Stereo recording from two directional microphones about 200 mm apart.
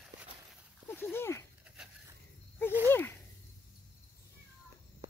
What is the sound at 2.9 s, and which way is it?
Snake, 10° left (ahead or behind).